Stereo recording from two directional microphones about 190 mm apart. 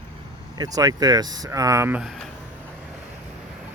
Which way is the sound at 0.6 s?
20° right (ahead or behind).